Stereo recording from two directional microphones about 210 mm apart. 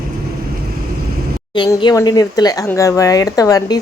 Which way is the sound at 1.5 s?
20° left (ahead or behind).